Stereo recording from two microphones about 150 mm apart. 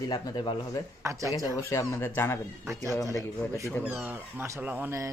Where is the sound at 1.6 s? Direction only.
20° left (ahead or behind).